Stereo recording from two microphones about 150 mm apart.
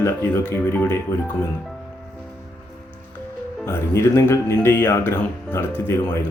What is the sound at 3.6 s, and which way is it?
Speech, 15° left (ahead or behind).